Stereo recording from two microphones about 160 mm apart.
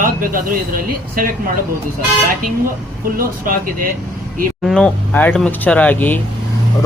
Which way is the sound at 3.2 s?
60° right (ahead or behind).